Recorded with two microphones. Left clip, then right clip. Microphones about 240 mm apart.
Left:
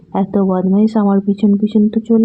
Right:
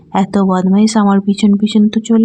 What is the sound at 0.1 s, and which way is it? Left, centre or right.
A woman's voice, right.